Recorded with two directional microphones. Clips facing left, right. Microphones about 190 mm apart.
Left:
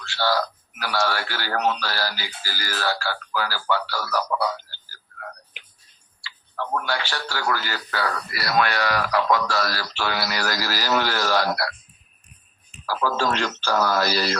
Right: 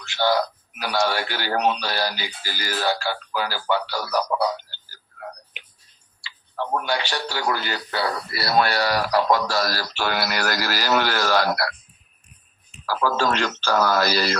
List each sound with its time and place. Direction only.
0.0 s a sound: 20° right (ahead or behind)
0.8 s speech: 15° right (ahead or behind); by 11.7 s 60° right (ahead or behind)
13.0 s speech: 55° right (ahead or behind)